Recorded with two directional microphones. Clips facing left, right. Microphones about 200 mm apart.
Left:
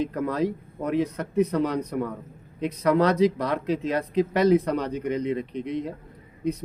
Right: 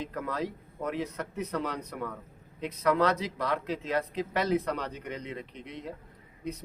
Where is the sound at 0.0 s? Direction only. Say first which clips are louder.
Left 8 dB; 20° left (ahead or behind).